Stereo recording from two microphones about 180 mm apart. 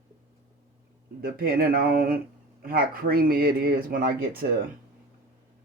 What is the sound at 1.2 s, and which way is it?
Speech, 55° right (ahead or behind).